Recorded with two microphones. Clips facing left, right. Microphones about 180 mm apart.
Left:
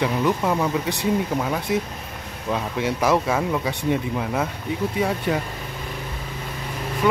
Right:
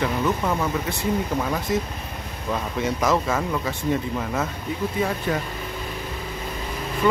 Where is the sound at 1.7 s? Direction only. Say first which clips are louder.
Left 1 dB; 10° left (ahead or behind).